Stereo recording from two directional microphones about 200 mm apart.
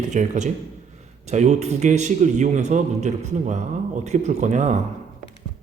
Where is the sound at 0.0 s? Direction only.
35° right (ahead or behind).